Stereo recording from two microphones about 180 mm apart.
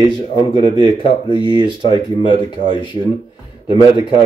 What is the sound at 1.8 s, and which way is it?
Speech, 25° left (ahead or behind).